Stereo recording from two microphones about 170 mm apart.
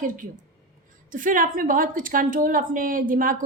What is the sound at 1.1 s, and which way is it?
A woman's voice, 50° right (ahead or behind).